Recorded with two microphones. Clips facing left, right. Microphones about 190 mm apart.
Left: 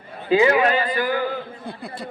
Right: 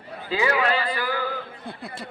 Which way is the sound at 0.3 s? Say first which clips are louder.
Left 6 dB; 20° left (ahead or behind).